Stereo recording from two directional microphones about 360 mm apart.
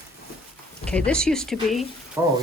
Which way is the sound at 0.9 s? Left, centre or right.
Centre.